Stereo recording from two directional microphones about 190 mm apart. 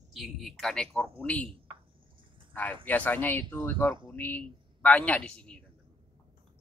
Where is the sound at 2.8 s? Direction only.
10° left (ahead or behind).